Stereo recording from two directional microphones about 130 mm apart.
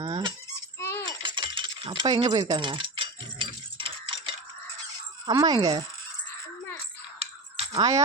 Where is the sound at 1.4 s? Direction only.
40° right (ahead or behind).